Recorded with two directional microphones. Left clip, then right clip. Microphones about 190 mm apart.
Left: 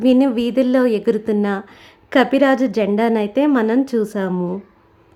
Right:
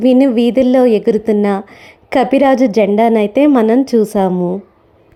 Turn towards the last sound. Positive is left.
turn(degrees=-10)  # may be behind; listen again after turning